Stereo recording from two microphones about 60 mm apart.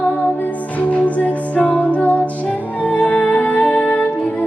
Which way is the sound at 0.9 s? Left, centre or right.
Left.